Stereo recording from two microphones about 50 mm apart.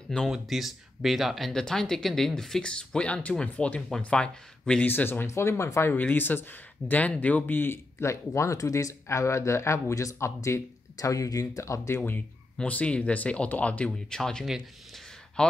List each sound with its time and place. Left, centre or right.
0.3 s speech: centre
1.5 s speech: centre
4.8 s speech: left
5.2 s speech: left
6.1 s speech: left
6.9 s speech: left
8.0 s speech: left
11.1 s speech: left
12.6 s speech: left
14.1 s speech: centre